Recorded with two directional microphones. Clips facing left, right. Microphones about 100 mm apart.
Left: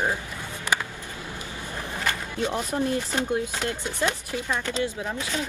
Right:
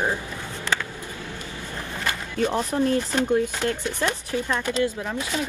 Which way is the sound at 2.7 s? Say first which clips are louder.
Right 3 dB; 15° left (ahead or behind).